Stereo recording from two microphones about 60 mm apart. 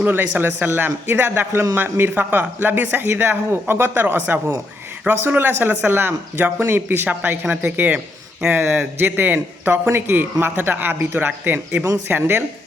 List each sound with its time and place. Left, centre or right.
0.0 s speech: right
5.5 s speech: right